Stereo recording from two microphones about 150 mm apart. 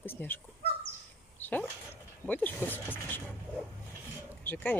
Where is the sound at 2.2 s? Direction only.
10° left (ahead or behind).